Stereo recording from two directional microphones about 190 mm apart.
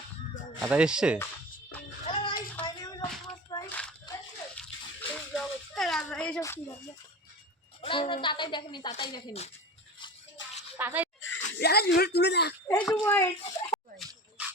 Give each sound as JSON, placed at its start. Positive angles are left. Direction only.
{"t": 0.7, "sound": "speech", "side_deg": -5}
{"t": 2.0, "sound": "music", "side_deg": 25}
{"t": 2.6, "sound": "a sound", "side_deg": 20}
{"t": 3.5, "sound": "biting", "side_deg": 20}
{"t": 4.9, "sound": "a sound", "side_deg": 5}
{"t": 7.8, "sound": "a woman's voice", "side_deg": 25}
{"t": 10.4, "sound": "music", "side_deg": 75}
{"t": 10.8, "sound": "a sound", "side_deg": -10}
{"t": 11.2, "sound": "speech", "side_deg": 70}
{"t": 12.8, "sound": "a woman's voice", "side_deg": 10}